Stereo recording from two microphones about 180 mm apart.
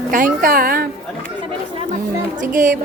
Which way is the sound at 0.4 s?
55° right (ahead or behind).